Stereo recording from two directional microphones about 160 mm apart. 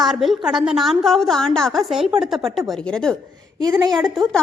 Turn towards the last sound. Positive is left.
turn(degrees=-25)  # may be behind; listen again after turning